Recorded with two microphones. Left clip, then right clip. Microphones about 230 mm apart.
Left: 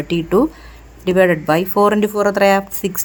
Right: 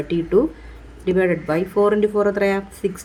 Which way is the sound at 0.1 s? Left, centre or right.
Left.